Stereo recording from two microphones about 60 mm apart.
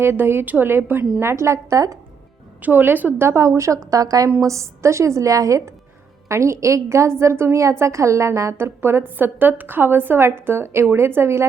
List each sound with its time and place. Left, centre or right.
0.0 s a woman's voice: right
2.6 s a woman's voice: right
3.3 s a woman's voice: right
4.4 s a woman's voice: right
6.2 s a woman's voice: right
8.5 s a woman's voice: right